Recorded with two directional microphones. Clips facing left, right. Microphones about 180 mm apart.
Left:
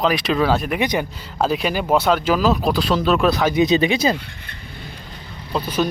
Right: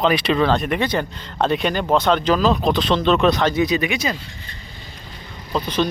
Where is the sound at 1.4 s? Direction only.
5° left (ahead or behind).